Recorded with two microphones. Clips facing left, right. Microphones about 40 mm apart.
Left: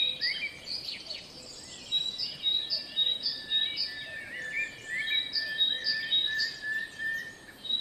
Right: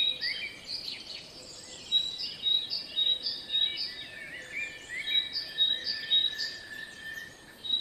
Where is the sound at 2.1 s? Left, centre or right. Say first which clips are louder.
Right 1 dB; right.